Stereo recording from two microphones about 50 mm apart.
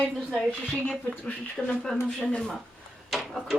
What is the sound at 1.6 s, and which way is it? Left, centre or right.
Speech, left.